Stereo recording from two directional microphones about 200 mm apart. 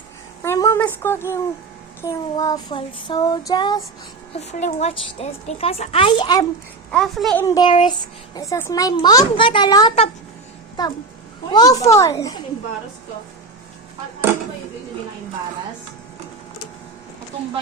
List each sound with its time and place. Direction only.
0.4 s a sound: 15° left (ahead or behind)
2.0 s child singing: 15° left (ahead or behind)
4.4 s a woman's voice: 35° left (ahead or behind)
6.9 s speech: centre (ahead or behind)
7.4 s child singing: 20° left (ahead or behind)
11.9 s a child's voice: 15° left (ahead or behind)